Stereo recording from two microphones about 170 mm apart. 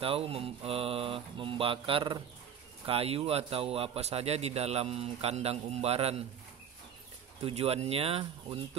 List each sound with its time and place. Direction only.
0.0 s a man's voice: 35° right (ahead or behind)
7.4 s a man's voice: 35° right (ahead or behind)